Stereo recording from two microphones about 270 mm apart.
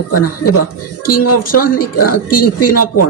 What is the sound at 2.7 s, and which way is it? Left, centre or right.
Speech, left.